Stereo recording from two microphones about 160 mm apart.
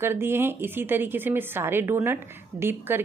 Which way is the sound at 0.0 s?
15° right (ahead or behind).